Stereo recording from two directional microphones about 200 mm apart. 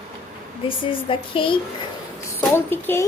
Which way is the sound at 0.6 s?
25° left (ahead or behind).